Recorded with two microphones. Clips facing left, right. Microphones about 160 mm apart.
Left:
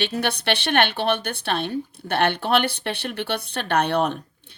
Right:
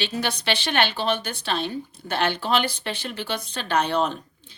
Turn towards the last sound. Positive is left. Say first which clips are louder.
# left 2 dB
turn(degrees=60)  # may be behind; listen again after turning